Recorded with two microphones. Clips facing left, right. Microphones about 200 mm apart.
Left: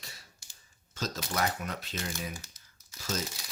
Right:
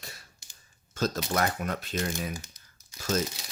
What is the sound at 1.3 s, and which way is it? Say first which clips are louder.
Speech: even; 50° right (ahead or behind).